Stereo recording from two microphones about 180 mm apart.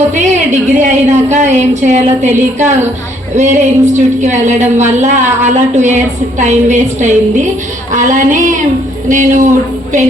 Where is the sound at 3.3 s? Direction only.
40° right (ahead or behind).